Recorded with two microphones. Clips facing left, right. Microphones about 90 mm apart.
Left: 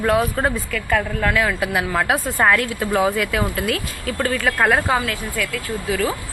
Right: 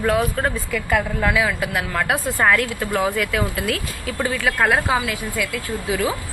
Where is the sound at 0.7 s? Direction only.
10° right (ahead or behind).